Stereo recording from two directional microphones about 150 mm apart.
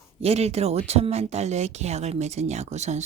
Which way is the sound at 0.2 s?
45° right (ahead or behind).